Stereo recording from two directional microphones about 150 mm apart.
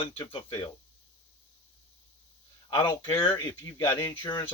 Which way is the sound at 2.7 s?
30° left (ahead or behind).